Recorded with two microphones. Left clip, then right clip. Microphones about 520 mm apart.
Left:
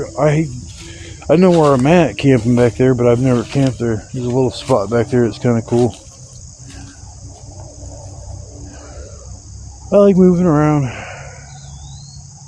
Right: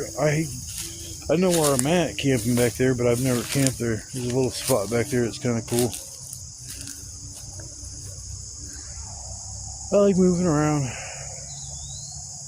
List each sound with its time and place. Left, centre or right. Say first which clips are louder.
0.0 s speech: left 8 dB; right
9.9 s speech: left 9 dB; right